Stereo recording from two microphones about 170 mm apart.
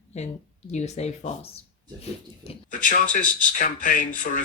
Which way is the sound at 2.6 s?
50° left (ahead or behind).